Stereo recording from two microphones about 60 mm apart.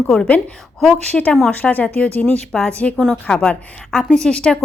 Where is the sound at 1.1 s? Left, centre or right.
Left.